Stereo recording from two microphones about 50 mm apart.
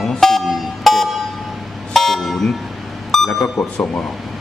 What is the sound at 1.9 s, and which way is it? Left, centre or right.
Vehicle, centre.